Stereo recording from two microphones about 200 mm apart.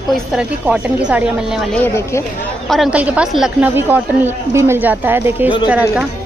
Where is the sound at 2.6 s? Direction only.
5° right (ahead or behind).